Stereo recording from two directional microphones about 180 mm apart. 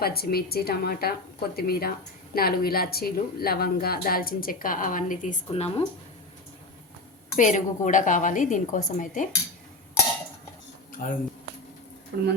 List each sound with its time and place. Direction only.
0.0 s speech: 60° left (ahead or behind); by 5.8 s 35° left (ahead or behind)
7.3 s a woman's voice: 45° left (ahead or behind)
11.0 s a woman's voice: 45° left (ahead or behind)
12.1 s speech: 60° right (ahead or behind)